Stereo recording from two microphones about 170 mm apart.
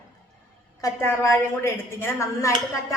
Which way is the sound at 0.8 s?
15° left (ahead or behind).